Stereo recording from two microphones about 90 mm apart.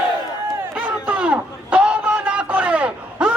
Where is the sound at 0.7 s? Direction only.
20° right (ahead or behind).